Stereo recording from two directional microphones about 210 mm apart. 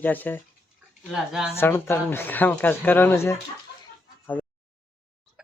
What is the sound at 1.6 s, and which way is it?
Speech, 10° left (ahead or behind).